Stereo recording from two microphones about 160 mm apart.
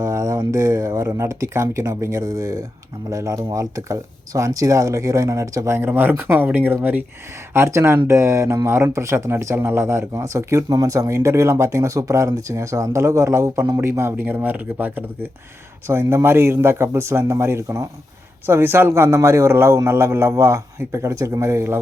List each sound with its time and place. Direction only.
0.0 s speech: 20° right (ahead or behind)